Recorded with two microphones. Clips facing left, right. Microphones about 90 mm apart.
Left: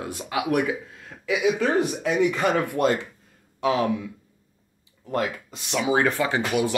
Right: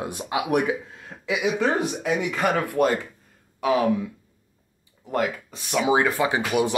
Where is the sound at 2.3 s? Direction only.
5° right (ahead or behind).